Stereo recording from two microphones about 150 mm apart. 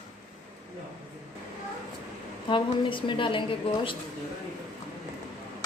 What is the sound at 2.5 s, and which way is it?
A woman's voice, 35° left (ahead or behind).